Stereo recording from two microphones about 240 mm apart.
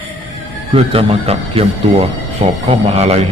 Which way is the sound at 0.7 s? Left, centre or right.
Right.